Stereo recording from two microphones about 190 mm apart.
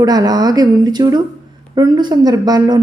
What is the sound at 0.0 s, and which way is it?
Speech, 20° right (ahead or behind).